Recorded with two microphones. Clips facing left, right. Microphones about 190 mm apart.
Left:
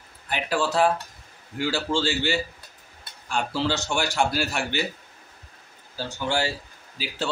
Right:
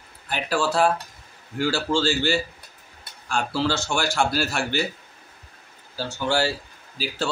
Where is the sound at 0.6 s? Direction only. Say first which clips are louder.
Right 1 dB; 20° left (ahead or behind).